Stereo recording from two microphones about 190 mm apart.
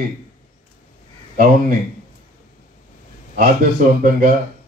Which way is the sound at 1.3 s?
50° right (ahead or behind).